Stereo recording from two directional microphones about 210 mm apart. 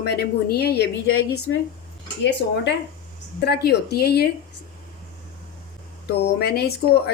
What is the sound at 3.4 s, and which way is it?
Speech, 50° left (ahead or behind).